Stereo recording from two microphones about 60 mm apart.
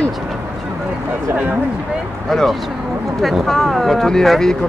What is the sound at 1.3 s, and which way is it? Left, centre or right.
Speech, right.